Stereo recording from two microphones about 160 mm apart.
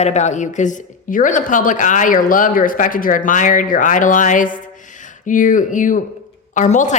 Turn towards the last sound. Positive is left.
turn(degrees=50)  # may be behind; listen again after turning